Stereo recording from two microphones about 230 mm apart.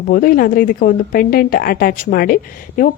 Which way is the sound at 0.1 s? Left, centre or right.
Left.